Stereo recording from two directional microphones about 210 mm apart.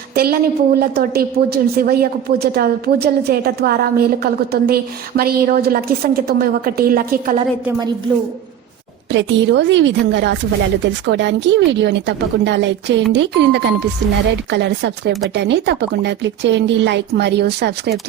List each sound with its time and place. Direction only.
0.1 s a woman's voice: 45° right (ahead or behind)
9.1 s a woman's voice: 60° right (ahead or behind)